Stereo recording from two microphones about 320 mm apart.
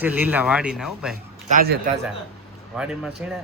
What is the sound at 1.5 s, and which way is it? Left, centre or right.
Speech, right.